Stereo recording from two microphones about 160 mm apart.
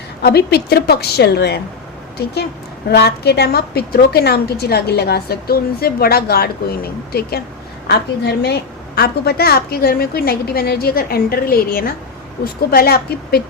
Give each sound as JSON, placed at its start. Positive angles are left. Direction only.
{"t": 0.2, "sound": "a woman's voice", "side_deg": 85}
{"t": 7.9, "sound": "a woman's voice", "side_deg": 90}